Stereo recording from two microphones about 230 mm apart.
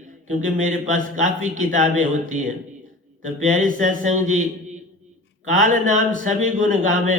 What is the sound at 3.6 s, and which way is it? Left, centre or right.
Speech, right.